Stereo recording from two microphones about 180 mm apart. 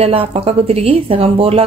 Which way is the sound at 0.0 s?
30° right (ahead or behind).